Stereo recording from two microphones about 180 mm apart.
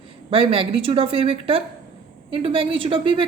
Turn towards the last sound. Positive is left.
turn(degrees=-30)  # may be behind; listen again after turning